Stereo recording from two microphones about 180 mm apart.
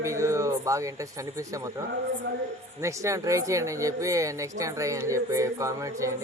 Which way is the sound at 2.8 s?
15° right (ahead or behind).